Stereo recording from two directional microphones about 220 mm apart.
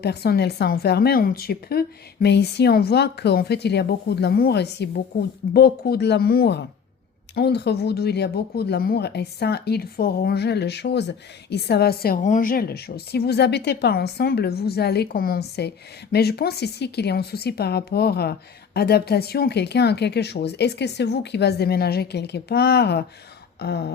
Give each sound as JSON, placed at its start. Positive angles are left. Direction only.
{"t": 0.0, "sound": "speech", "side_deg": 45}